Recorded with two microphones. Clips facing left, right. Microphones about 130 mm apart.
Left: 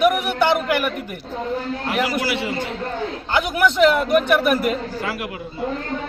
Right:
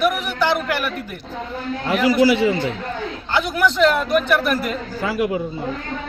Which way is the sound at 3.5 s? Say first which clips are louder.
Left 1 dB; 10° left (ahead or behind).